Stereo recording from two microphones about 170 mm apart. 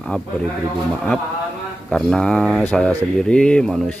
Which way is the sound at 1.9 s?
Centre (ahead or behind).